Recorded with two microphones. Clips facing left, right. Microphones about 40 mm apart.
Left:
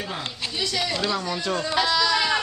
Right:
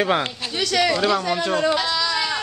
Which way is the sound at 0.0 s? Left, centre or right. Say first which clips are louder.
Right 10 dB; right.